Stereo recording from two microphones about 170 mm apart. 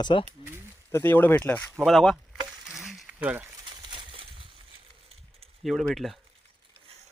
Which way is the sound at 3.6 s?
30° right (ahead or behind).